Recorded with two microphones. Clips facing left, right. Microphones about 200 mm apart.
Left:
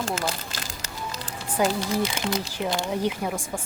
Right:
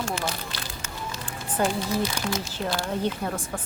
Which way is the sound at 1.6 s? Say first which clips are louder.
Left 2 dB; 10° left (ahead or behind).